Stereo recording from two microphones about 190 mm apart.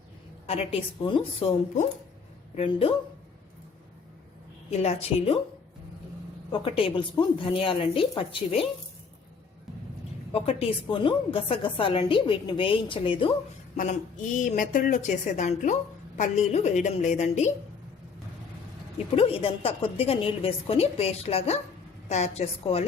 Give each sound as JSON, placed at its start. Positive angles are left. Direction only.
{"t": 0.4, "sound": "speech", "side_deg": 30}
{"t": 2.6, "sound": "speech", "side_deg": 30}
{"t": 4.8, "sound": "speech", "side_deg": 35}
{"t": 6.5, "sound": "a woman's voice", "side_deg": 25}
{"t": 10.3, "sound": "a woman's voice", "side_deg": 30}
{"t": 13.7, "sound": "speech", "side_deg": 45}
{"t": 19.1, "sound": "speech", "side_deg": 30}